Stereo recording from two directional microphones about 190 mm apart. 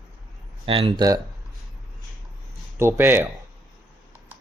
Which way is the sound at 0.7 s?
30° right (ahead or behind).